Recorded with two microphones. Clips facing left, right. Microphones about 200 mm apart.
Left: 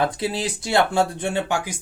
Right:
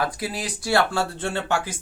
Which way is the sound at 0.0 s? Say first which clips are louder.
Left 4 dB; 25° left (ahead or behind).